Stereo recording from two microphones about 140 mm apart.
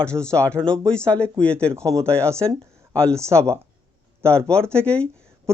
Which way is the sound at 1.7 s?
25° right (ahead or behind).